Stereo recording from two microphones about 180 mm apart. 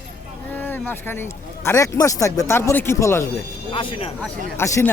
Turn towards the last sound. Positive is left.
turn(degrees=15)  # may be behind; listen again after turning